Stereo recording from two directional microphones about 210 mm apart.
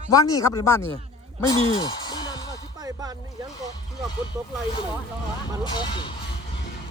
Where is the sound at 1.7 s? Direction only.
20° left (ahead or behind).